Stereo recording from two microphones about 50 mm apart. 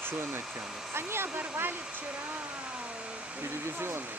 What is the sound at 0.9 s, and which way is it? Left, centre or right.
Speech, right.